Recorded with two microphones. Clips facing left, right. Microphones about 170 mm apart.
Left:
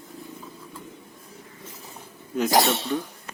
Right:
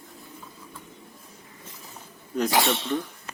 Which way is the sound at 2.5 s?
40° left (ahead or behind).